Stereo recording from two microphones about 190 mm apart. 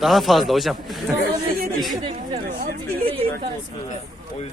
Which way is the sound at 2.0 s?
35° right (ahead or behind).